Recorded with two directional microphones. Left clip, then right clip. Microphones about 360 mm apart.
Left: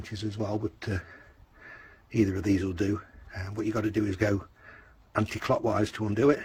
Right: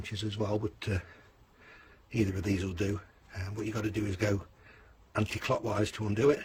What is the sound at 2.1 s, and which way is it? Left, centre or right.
Speech, centre.